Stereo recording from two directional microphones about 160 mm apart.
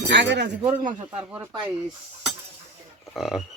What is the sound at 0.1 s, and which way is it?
Speech, 90° right.